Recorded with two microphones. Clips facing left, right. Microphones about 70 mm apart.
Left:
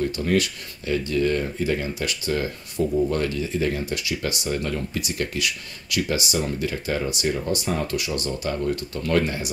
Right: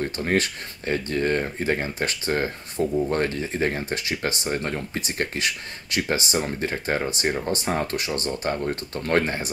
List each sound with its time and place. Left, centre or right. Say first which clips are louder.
0.0 s speech: left 1 dB; right